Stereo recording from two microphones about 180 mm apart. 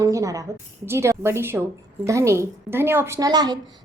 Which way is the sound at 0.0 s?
20° right (ahead or behind).